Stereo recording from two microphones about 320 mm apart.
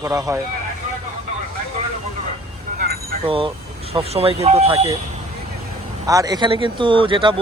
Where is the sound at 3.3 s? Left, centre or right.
Centre.